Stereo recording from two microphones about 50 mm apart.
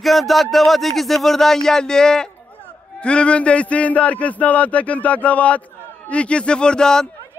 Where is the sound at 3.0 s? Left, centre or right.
Left.